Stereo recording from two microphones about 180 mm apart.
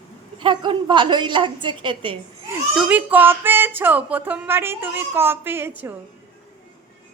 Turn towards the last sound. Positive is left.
turn(degrees=-10)  # may be behind; listen again after turning